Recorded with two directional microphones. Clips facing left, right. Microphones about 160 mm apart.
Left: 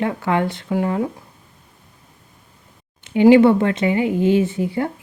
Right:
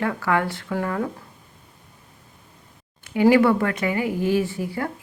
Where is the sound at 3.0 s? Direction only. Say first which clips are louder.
Left 5 dB; 20° left (ahead or behind).